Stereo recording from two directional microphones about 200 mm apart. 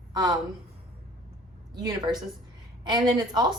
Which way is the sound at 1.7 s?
20° right (ahead or behind).